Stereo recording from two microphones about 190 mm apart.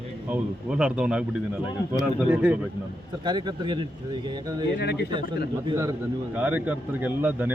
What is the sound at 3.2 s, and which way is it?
Speech, 25° right (ahead or behind).